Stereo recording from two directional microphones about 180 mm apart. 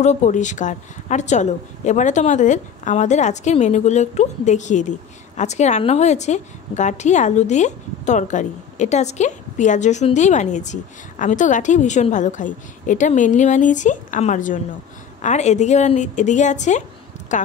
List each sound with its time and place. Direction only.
0.0 s a woman's voice: 40° left (ahead or behind)